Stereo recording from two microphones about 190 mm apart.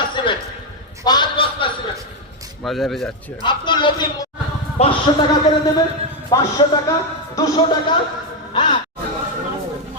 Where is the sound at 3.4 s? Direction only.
25° left (ahead or behind).